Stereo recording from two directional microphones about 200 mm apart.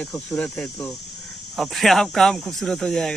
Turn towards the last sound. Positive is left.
turn(degrees=0)  # may be behind; listen again after turning